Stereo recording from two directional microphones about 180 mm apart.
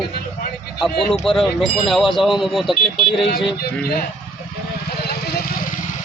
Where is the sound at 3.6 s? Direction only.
60° left (ahead or behind).